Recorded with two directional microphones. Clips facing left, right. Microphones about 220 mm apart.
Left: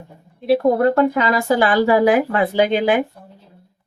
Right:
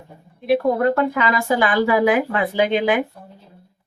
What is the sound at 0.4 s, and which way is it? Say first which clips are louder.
Speech: left 2 dB; 30° left (ahead or behind).